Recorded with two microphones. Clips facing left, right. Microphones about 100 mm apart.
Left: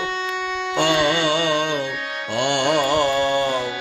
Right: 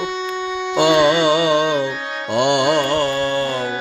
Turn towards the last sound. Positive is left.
turn(degrees=15)  # may be behind; listen again after turning